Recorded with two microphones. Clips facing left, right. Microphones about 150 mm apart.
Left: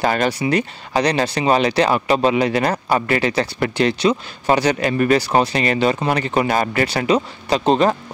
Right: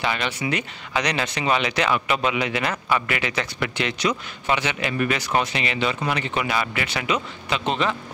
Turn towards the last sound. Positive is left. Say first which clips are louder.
# left 8 dB
turn(degrees=40)  # may be behind; listen again after turning